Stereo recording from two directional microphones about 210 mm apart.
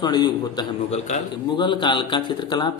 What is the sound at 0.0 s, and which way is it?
Speech, 20° left (ahead or behind).